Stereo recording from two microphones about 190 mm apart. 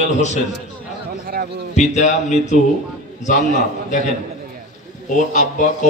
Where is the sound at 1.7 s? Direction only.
40° left (ahead or behind).